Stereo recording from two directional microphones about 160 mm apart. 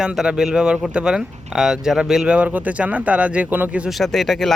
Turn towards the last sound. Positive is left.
turn(degrees=0)  # may be behind; listen again after turning